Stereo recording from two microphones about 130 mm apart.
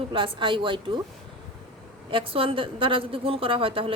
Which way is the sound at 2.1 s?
45° right (ahead or behind).